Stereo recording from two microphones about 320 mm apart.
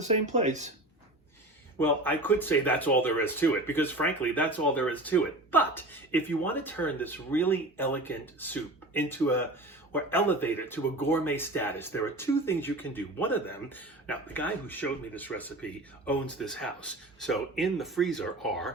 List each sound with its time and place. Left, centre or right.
0.0 s speech: right
1.8 s speech: centre